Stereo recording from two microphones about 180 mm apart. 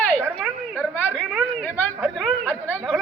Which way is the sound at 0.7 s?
10° left (ahead or behind).